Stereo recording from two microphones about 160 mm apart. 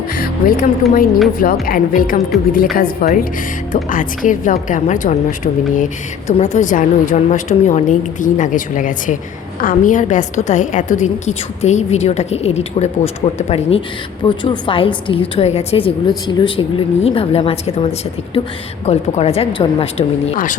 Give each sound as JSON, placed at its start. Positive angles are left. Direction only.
{"t": 0.1, "sound": "speech", "side_deg": 60}
{"t": 2.3, "sound": "a woman's voice", "side_deg": 0}
{"t": 2.7, "sound": "a woman's voice", "side_deg": 60}
{"t": 18.9, "sound": "a woman's voice", "side_deg": 40}
{"t": 20.3, "sound": "speech", "side_deg": 55}